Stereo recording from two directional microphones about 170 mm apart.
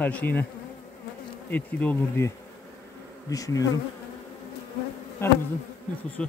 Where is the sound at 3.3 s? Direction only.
20° left (ahead or behind).